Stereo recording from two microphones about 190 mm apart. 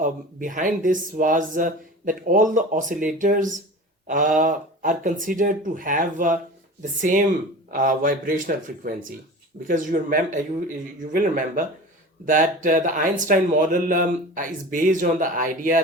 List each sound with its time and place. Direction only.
0.0 s speech: 45° right (ahead or behind)